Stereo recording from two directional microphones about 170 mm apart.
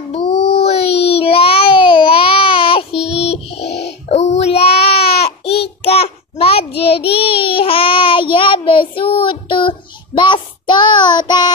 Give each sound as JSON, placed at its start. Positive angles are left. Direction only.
{"t": 0.4, "sound": "child singing", "side_deg": 75}
{"t": 0.7, "sound": "a sound", "side_deg": 35}
{"t": 2.9, "sound": "child singing", "side_deg": -5}
{"t": 3.2, "sound": "music", "side_deg": 35}
{"t": 3.6, "sound": "music", "side_deg": 85}
{"t": 4.1, "sound": "child singing", "side_deg": 40}